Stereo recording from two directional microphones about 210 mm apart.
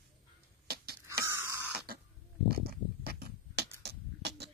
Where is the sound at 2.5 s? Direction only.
50° right (ahead or behind).